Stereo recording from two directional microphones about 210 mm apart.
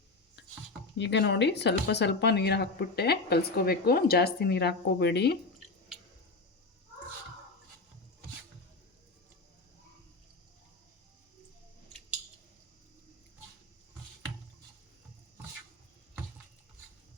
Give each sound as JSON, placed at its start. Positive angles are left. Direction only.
{"t": 0.9, "sound": "speech", "side_deg": 55}